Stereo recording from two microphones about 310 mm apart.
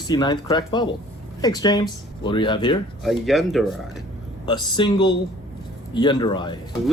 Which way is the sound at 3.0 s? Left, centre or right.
Centre.